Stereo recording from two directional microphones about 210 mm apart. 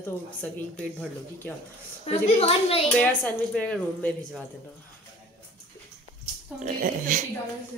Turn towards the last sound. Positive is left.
turn(degrees=-40)  # may be behind; listen again after turning